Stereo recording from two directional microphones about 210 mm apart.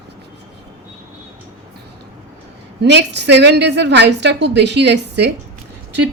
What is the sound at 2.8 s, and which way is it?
A woman's voice, 55° right (ahead or behind).